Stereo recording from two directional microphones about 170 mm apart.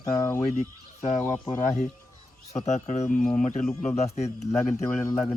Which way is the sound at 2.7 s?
40° left (ahead or behind).